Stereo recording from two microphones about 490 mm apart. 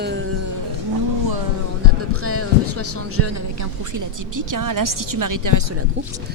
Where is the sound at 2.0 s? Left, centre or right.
Right.